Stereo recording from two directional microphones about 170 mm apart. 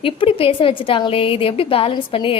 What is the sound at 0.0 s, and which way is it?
A woman's voice, 35° left (ahead or behind).